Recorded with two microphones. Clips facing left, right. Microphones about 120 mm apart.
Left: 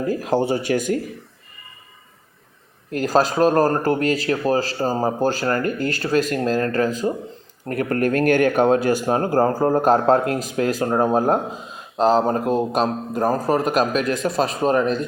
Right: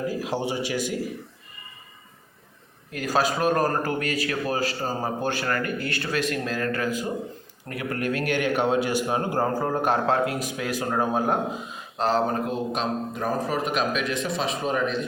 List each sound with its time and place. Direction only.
0.1 s speech: 45° left (ahead or behind)
2.9 s speech: 40° left (ahead or behind)